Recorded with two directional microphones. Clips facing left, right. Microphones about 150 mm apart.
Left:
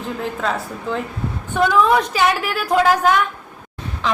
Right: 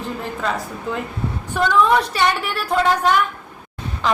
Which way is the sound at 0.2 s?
Centre (ahead or behind).